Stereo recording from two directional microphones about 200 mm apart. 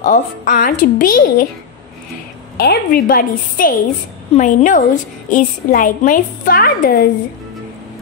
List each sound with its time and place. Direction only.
0.0 s a woman's voice: 40° left (ahead or behind)
2.5 s a woman's voice: 50° left (ahead or behind)